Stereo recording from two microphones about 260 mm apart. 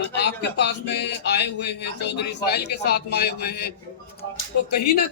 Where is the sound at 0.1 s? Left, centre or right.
Left.